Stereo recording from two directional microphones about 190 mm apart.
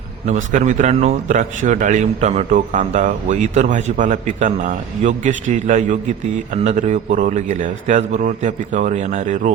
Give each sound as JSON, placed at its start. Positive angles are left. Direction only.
{"t": 0.3, "sound": "a man's voice", "side_deg": -40}